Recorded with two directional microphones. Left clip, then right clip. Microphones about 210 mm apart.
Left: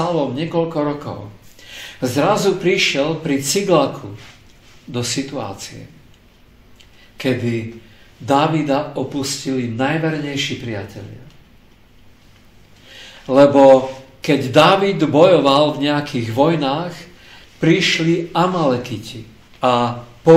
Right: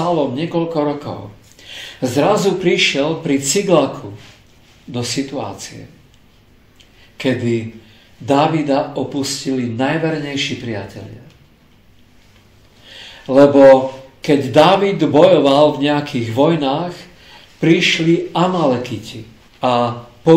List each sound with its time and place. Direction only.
0.1 s speech: 20° left (ahead or behind)
4.9 s speech: 20° left (ahead or behind)
7.2 s a man's voice: 15° left (ahead or behind)
12.8 s a sound: 15° left (ahead or behind)
14.2 s speech: 20° left (ahead or behind)